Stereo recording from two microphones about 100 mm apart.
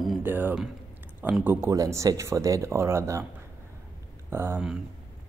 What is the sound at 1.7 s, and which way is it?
Speech, 30° right (ahead or behind).